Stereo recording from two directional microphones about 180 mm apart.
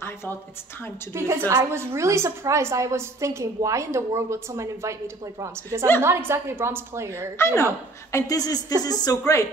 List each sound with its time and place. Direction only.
1.1 s a woman's voice: 15° right (ahead or behind)
7.3 s a woman's voice: 15° left (ahead or behind)